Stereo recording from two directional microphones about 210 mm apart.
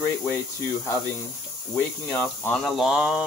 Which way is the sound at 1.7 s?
10° left (ahead or behind).